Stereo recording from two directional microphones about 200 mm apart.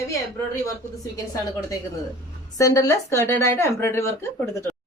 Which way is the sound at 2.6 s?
15° left (ahead or behind).